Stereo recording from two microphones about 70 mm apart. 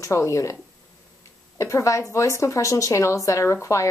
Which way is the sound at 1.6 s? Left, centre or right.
Left.